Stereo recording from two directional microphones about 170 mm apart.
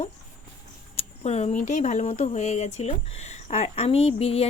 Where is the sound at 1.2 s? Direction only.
40° left (ahead or behind).